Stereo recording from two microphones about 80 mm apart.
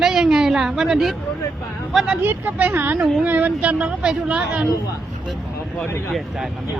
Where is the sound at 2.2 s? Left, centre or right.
Right.